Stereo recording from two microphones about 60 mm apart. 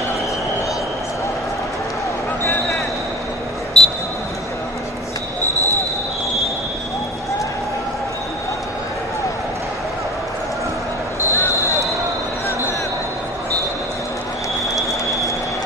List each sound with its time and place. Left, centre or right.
3.8 s basketball bounce: centre
11.1 s basketball bounce: left